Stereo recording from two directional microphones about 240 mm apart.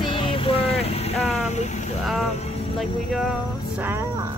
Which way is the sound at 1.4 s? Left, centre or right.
Left.